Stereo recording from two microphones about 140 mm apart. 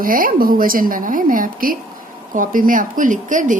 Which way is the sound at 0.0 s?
85° right.